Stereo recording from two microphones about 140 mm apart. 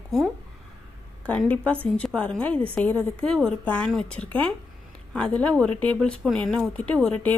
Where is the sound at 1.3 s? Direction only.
10° left (ahead or behind).